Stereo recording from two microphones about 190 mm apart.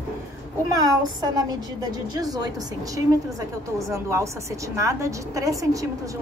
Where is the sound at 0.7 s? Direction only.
20° right (ahead or behind).